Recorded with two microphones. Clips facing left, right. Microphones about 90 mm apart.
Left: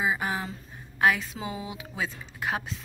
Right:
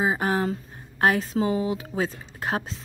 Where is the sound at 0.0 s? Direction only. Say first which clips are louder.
Right 5 dB; 45° right (ahead or behind).